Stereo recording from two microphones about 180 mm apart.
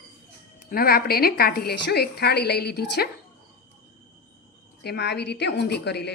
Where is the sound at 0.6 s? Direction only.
55° left (ahead or behind).